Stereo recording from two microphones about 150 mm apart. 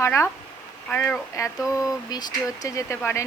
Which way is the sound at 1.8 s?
25° left (ahead or behind).